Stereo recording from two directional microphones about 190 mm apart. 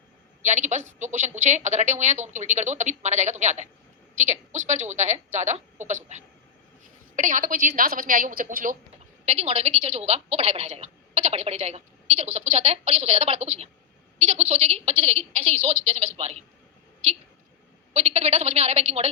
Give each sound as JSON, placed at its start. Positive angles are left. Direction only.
{"t": 0.4, "sound": "a woman's voice", "side_deg": -40}
{"t": 9.2, "sound": "a woman's voice", "side_deg": -35}
{"t": 17.9, "sound": "a woman's voice", "side_deg": -35}